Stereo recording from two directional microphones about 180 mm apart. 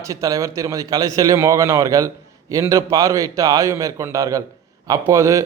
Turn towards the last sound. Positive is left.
turn(degrees=-15)  # may be behind; listen again after turning